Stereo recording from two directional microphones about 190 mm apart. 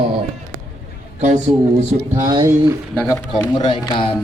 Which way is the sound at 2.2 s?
20° right (ahead or behind).